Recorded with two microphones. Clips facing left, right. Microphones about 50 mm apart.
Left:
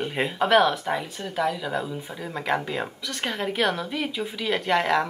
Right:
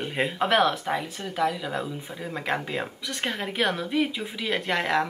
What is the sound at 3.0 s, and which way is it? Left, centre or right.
Speech, centre.